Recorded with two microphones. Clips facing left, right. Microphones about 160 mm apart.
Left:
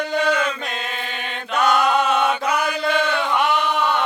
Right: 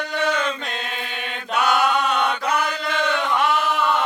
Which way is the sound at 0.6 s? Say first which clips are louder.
Left 1 dB; centre (ahead or behind).